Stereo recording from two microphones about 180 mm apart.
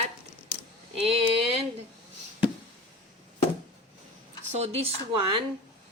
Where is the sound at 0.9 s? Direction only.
35° right (ahead or behind).